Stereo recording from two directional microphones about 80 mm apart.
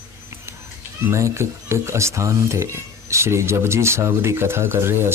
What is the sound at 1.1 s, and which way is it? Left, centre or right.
Speech, right.